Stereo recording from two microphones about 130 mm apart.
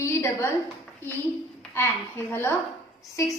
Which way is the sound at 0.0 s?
20° left (ahead or behind).